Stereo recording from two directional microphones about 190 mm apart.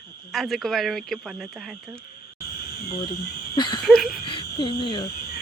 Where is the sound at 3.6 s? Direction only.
25° left (ahead or behind).